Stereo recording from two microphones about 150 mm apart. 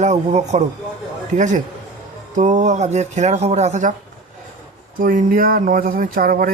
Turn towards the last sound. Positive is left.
turn(degrees=-75)  # may be behind; listen again after turning